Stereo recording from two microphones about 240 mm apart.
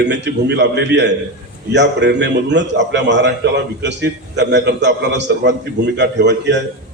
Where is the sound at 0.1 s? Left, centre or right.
Right.